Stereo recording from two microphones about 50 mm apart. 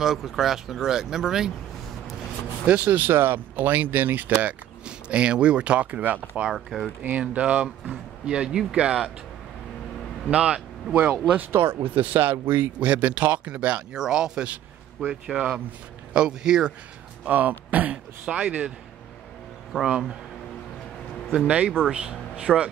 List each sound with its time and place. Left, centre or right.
0.0 s speech: centre
2.6 s speech: right
3.1 s speech: right
4.8 s speech: right
6.5 s speech: centre
7.0 s speech: right
10.2 s speech: right
11.5 s speech: right; by 16.7 s centre
17.3 s speech: right
19.7 s speech: centre
21.3 s speech: right
21.8 s speech: centre